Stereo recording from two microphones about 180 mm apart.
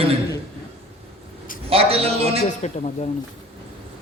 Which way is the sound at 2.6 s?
40° left (ahead or behind).